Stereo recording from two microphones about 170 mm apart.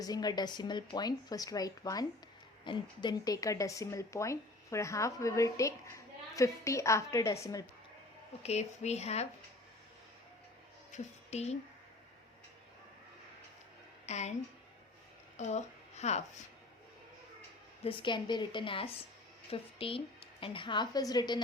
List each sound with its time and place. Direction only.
0.0 s a woman's voice: 25° left (ahead or behind)
8.4 s speech: 40° left (ahead or behind)
10.9 s speech: 40° left (ahead or behind)
14.1 s speech: 40° left (ahead or behind)
15.4 s speech: 45° left (ahead or behind)
17.8 s speech: 25° left (ahead or behind)